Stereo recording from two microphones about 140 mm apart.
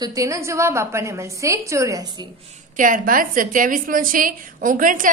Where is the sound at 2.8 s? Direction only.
75° right (ahead or behind).